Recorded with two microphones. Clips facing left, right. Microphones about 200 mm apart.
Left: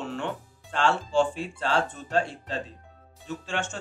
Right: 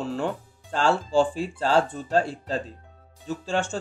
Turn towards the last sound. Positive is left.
turn(degrees=-35)  # may be behind; listen again after turning